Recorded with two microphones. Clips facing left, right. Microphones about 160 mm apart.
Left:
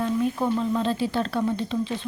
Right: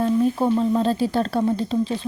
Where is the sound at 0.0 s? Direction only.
35° right (ahead or behind).